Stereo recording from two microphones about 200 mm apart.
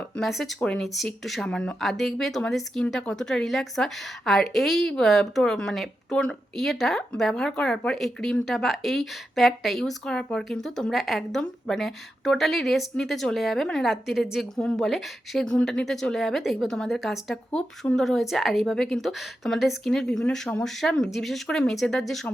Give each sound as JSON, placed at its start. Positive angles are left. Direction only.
{"t": 0.2, "sound": "speech", "side_deg": 0}